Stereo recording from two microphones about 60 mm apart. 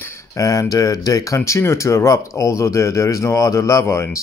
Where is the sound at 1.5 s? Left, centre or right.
Left.